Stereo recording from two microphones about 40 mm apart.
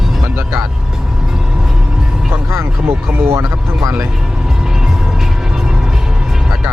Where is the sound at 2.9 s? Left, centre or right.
Right.